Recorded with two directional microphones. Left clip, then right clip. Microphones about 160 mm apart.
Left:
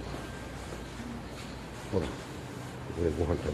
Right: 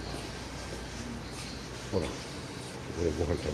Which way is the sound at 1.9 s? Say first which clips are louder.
Even; 25° left (ahead or behind).